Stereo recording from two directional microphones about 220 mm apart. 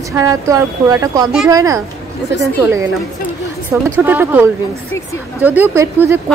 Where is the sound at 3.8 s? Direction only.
10° right (ahead or behind).